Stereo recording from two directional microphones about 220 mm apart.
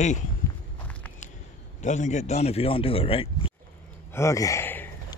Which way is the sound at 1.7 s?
30° left (ahead or behind).